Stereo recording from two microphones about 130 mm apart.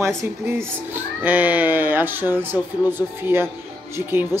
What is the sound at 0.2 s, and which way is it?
Speech, 20° right (ahead or behind).